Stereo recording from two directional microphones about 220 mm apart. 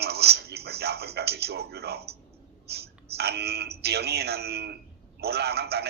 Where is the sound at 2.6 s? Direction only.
45° right (ahead or behind).